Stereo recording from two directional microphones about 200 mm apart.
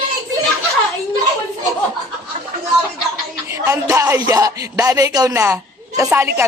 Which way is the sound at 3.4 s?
15° right (ahead or behind).